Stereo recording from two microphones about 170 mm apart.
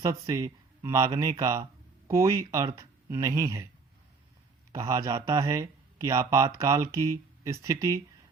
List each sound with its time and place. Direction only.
0.0 s speech: 20° right (ahead or behind)
4.7 s speech: 20° right (ahead or behind)